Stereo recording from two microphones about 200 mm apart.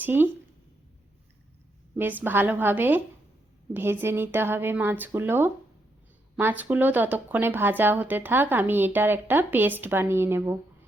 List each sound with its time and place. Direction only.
0.0 s speech: 10° right (ahead or behind)
2.0 s speech: 10° right (ahead or behind)